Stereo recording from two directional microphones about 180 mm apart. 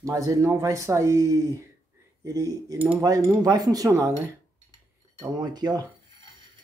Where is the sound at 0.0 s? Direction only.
20° right (ahead or behind).